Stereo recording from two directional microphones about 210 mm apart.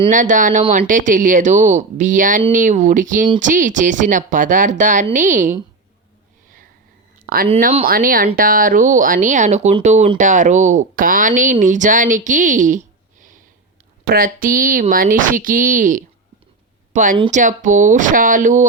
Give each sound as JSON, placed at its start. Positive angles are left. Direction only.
{"t": 0.1, "sound": "a woman's voice", "side_deg": -35}
{"t": 7.3, "sound": "a woman's voice", "side_deg": -45}